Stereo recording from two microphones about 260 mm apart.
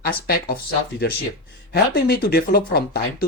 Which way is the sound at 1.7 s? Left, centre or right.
Left.